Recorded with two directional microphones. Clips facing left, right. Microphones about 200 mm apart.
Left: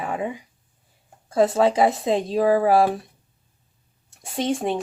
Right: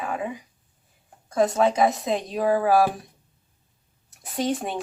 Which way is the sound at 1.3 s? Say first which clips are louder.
Left 2 dB; 30° left (ahead or behind).